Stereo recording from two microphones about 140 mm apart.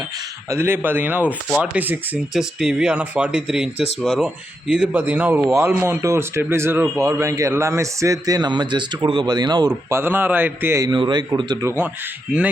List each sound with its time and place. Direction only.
0.5 s a man's voice: 15° right (ahead or behind)
9.9 s speech: 15° right (ahead or behind)
10.9 s speech: 35° right (ahead or behind)